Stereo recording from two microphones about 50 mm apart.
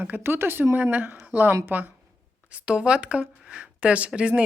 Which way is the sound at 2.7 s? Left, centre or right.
Right.